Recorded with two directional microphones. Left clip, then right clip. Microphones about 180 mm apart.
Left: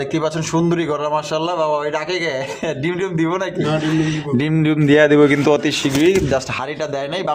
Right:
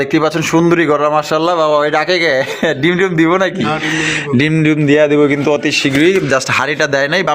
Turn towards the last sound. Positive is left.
turn(degrees=-5)  # may be behind; listen again after turning